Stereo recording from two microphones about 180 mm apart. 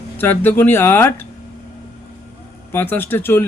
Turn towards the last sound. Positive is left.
turn(degrees=10)  # may be behind; listen again after turning